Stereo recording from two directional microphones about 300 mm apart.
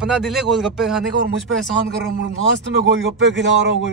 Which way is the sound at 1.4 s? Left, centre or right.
Right.